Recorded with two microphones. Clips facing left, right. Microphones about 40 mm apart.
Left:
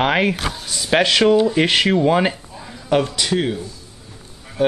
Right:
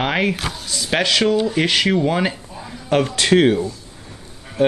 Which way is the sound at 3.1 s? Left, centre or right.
Right.